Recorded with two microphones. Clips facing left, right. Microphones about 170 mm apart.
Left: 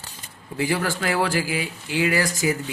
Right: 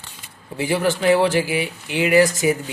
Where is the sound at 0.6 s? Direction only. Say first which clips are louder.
Right 4 dB; 20° right (ahead or behind).